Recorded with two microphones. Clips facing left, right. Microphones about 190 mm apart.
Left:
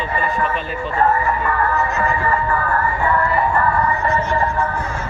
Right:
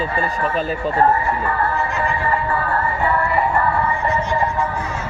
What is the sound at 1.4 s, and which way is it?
Music, 30° right (ahead or behind).